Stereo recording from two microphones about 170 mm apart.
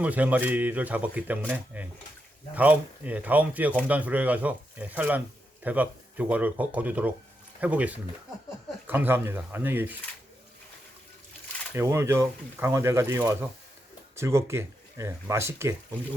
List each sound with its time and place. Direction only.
0.0 s speech: 10° right (ahead or behind)
11.7 s speech: 15° right (ahead or behind)